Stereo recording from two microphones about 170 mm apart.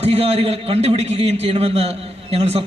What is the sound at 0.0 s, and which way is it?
A man's voice, 35° right (ahead or behind).